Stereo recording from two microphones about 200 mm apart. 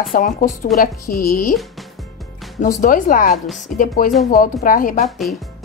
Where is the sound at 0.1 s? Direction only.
45° left (ahead or behind).